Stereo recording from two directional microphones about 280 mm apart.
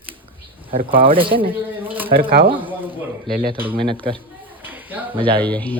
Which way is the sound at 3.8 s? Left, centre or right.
Centre.